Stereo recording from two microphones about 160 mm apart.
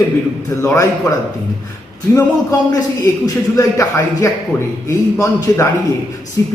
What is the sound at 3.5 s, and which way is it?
A man's voice, 20° left (ahead or behind).